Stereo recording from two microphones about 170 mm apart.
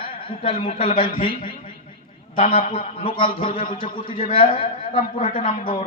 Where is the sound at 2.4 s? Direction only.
35° left (ahead or behind).